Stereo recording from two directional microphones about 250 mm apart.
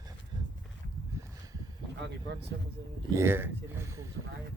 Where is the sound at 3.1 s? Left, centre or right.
Centre.